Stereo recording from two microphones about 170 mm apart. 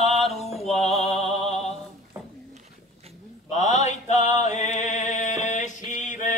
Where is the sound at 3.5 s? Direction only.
45° left (ahead or behind).